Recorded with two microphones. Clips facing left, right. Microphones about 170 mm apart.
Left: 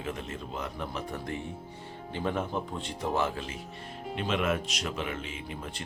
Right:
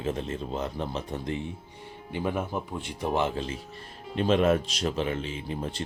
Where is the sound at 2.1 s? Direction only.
10° right (ahead or behind).